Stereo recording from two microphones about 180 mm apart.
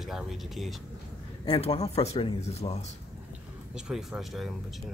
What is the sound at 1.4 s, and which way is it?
Speech, 25° left (ahead or behind).